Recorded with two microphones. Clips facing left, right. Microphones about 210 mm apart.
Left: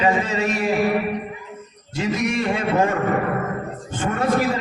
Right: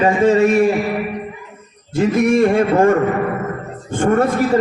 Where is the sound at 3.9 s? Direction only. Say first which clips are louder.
Right 10 dB; 55° right (ahead or behind).